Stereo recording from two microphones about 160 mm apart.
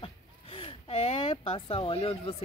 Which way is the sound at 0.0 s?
35° left (ahead or behind).